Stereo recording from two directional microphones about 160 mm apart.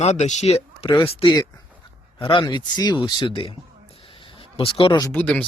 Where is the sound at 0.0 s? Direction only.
45° left (ahead or behind).